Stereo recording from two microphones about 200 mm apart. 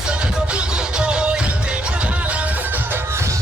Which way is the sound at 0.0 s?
5° right (ahead or behind).